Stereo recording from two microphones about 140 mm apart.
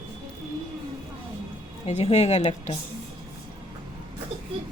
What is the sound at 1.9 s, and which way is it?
Speech, 50° left (ahead or behind).